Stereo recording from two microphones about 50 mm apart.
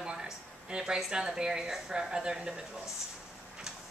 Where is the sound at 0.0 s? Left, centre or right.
Centre.